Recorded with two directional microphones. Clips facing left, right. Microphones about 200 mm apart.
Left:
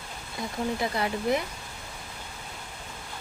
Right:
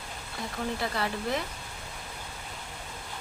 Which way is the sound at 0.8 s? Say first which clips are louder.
Left 3 dB; 15° left (ahead or behind).